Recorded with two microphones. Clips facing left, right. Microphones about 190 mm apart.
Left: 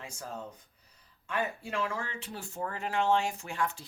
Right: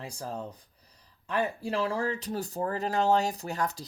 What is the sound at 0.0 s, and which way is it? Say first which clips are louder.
Speech: right 4 dB; 35° right (ahead or behind).